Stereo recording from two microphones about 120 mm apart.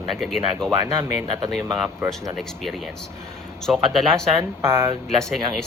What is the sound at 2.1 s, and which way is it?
Speech, centre (ahead or behind).